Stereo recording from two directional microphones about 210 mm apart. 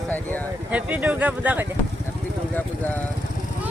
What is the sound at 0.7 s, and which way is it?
Speech, 5° right (ahead or behind).